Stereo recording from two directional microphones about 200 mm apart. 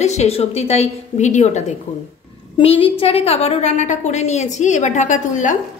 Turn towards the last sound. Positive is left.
turn(degrees=40)  # may be behind; listen again after turning